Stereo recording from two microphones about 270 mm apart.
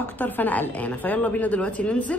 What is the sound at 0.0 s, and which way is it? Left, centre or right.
Speech, centre.